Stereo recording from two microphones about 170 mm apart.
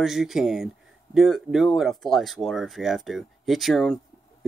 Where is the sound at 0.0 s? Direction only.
Centre (ahead or behind).